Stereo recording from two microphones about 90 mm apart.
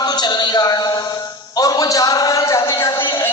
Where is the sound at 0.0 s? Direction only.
50° left (ahead or behind).